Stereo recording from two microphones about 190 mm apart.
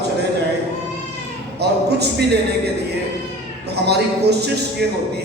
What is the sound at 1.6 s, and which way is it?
A man's voice, 60° right (ahead or behind).